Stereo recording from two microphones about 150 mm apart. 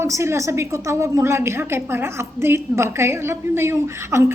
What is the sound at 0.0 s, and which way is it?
A woman's voice, 15° right (ahead or behind).